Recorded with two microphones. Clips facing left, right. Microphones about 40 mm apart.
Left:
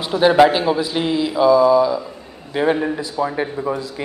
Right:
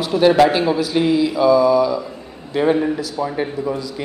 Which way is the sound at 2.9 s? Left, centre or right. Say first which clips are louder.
Left 1 dB; left.